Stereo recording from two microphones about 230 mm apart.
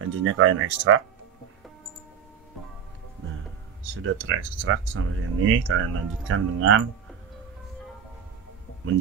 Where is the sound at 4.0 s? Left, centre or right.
Right.